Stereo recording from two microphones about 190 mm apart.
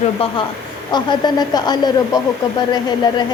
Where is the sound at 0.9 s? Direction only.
20° left (ahead or behind).